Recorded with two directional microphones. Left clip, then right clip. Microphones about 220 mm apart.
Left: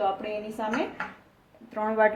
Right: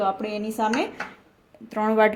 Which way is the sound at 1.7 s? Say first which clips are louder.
Right 4 dB; 45° right (ahead or behind).